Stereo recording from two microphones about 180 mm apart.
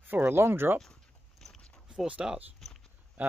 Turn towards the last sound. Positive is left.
turn(degrees=-10)  # may be behind; listen again after turning